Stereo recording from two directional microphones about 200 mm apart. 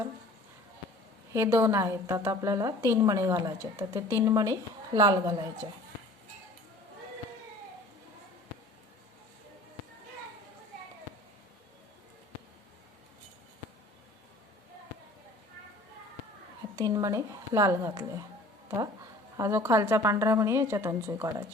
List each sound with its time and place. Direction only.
1.3 s a woman's voice: 15° right (ahead or behind)
16.7 s a woman's voice: 20° right (ahead or behind)
19.4 s a woman's voice: 15° right (ahead or behind)